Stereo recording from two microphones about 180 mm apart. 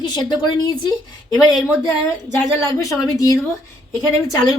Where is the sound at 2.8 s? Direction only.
20° left (ahead or behind).